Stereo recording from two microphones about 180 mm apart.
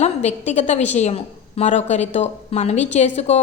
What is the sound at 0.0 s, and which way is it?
A woman's voice, 40° left (ahead or behind).